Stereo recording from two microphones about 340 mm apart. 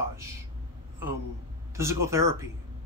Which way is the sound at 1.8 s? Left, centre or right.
Centre.